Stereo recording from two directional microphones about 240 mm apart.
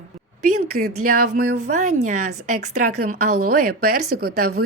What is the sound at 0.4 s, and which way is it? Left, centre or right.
Speech, right.